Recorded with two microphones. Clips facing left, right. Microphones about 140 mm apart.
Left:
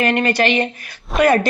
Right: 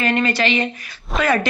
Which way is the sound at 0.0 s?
55° left (ahead or behind).